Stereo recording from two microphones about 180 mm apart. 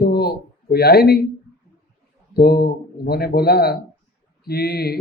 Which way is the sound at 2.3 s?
60° left (ahead or behind).